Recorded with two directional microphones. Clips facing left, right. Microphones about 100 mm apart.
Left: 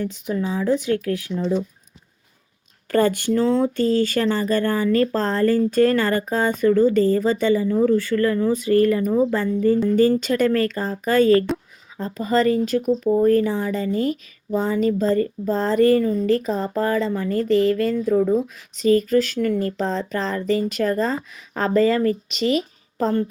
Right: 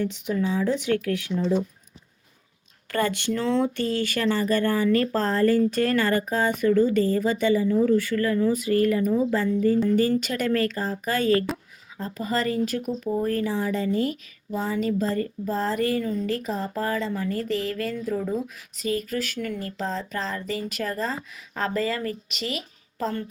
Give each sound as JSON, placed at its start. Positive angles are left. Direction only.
{"t": 2.9, "sound": "speech", "side_deg": 35}
{"t": 19.4, "sound": "speech", "side_deg": 45}
{"t": 19.8, "sound": "speech", "side_deg": 35}